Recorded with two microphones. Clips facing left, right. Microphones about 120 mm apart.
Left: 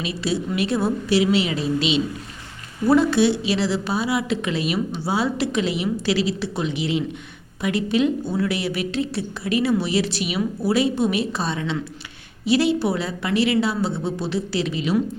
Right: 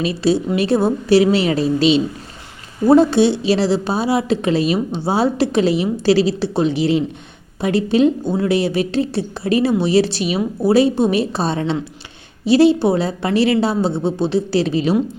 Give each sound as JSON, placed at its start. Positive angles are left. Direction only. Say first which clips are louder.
{"t": 0.0, "sound": "a woman's voice", "louder": "right 8 dB", "side_deg": -30}
{"t": 1.1, "sound": "a woman's voice", "louder": "right 6 dB", "side_deg": -40}
{"t": 2.8, "sound": "a woman's voice", "louder": "right 5 dB", "side_deg": -25}